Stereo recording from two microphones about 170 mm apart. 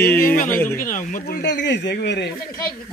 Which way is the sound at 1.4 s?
90° left.